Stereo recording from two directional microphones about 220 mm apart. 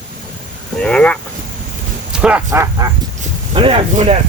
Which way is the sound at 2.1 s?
5° right (ahead or behind).